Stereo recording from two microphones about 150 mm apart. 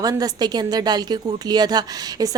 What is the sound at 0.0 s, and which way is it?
Speech, 25° right (ahead or behind).